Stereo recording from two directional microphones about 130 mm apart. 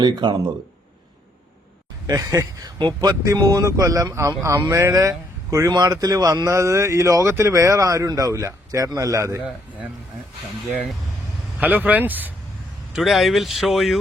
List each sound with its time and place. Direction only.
0.0 s speech: 35° right (ahead or behind)
2.0 s speech: 25° right (ahead or behind)
11.6 s speech: 15° right (ahead or behind)
12.9 s speech: centre (ahead or behind)